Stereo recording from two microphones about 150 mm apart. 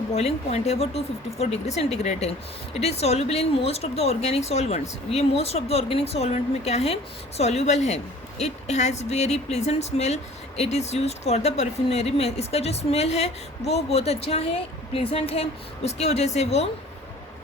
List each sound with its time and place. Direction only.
0.1 s speech: 45° left (ahead or behind)